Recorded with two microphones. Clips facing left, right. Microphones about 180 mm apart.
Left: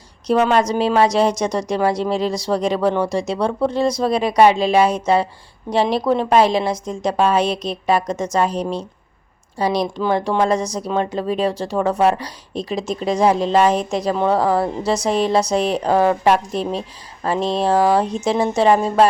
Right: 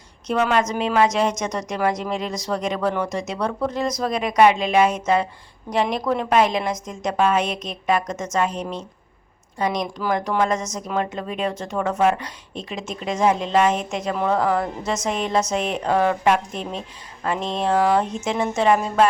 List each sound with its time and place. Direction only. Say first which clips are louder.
0.3 s speech: left 4 dB; 35° left (ahead or behind)